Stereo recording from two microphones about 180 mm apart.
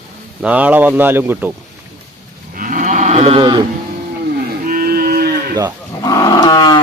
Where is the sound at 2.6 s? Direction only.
50° right (ahead or behind); by 3.6 s 30° right (ahead or behind).